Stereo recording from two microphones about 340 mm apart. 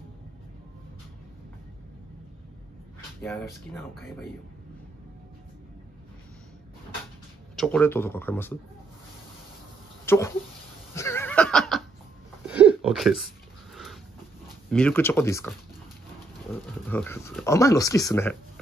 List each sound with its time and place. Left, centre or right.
3.2 s speech: centre
7.5 s speech: centre
10.0 s a sound: centre
14.7 s speech: centre
16.8 s speech: centre